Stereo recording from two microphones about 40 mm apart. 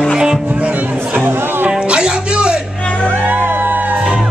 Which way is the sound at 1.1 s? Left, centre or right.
Right.